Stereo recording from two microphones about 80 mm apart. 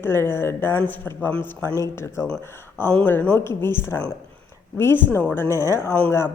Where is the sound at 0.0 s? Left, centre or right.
Left.